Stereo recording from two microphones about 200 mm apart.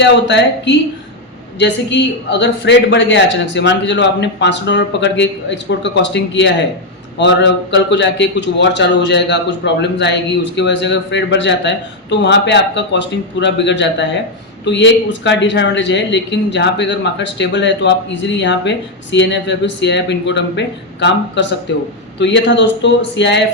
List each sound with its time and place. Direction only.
0.0 s speech: 65° left (ahead or behind)